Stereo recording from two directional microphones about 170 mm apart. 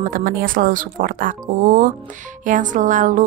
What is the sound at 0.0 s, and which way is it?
Speech, 55° right (ahead or behind).